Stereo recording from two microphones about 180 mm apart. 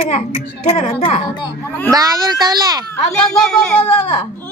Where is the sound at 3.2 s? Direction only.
5° left (ahead or behind).